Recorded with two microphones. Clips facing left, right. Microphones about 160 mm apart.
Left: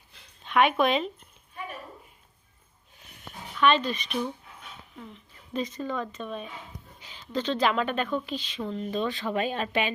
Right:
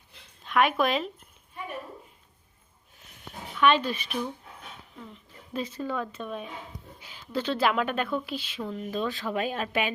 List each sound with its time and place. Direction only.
0.4 s speech: centre (ahead or behind)
3.6 s speech: 10° right (ahead or behind)
5.5 s speech: 10° right (ahead or behind)